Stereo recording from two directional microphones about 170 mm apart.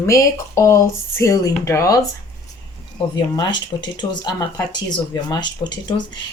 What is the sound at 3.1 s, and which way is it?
Speech, 25° left (ahead or behind).